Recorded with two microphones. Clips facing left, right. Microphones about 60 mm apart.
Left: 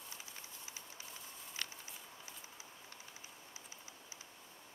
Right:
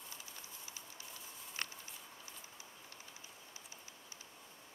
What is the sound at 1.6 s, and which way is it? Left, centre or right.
Walk, right.